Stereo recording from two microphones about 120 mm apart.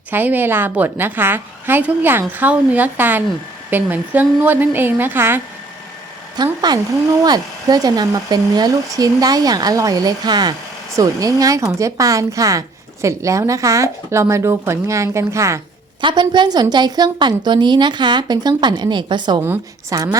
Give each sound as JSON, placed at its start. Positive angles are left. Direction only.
{"t": 0.1, "sound": "a woman's voice", "side_deg": -15}
{"t": 6.3, "sound": "speech", "side_deg": -35}
{"t": 16.0, "sound": "speech", "side_deg": -40}
{"t": 19.4, "sound": "speech", "side_deg": -20}